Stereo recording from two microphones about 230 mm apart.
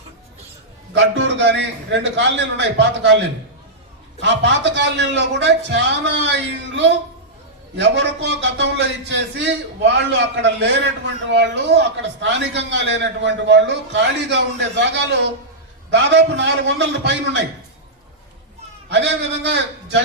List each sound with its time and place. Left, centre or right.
0.9 s a man's voice: right
18.9 s a man's voice: right